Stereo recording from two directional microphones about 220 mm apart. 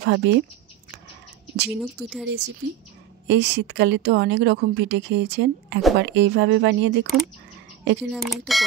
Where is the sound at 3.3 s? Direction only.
50° right (ahead or behind).